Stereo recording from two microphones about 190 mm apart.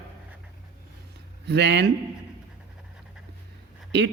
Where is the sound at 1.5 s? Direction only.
65° right (ahead or behind).